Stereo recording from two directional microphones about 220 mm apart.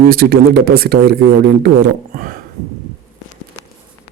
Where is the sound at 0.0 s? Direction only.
40° right (ahead or behind).